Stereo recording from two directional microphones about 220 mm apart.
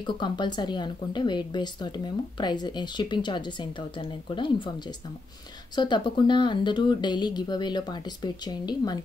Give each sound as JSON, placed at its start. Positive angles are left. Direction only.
{"t": 0.0, "sound": "a woman's voice", "side_deg": 20}